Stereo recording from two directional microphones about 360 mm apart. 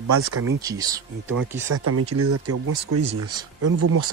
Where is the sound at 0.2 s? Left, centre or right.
Right.